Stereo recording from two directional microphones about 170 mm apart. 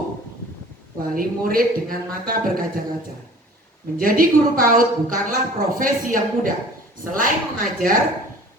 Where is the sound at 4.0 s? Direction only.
55° right (ahead or behind).